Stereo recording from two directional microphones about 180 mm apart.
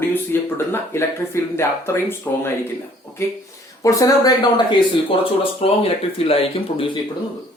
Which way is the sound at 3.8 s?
20° left (ahead or behind).